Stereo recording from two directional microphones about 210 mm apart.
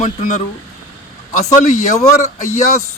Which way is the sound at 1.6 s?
35° left (ahead or behind).